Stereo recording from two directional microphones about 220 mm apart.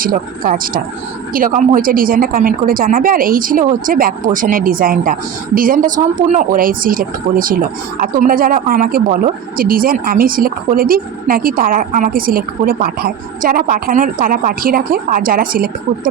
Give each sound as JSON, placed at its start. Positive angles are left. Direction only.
{"t": 0.0, "sound": "speech", "side_deg": -40}